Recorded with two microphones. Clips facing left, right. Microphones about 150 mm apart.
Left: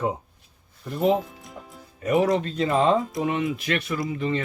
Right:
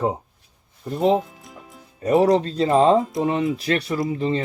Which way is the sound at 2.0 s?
30° right (ahead or behind).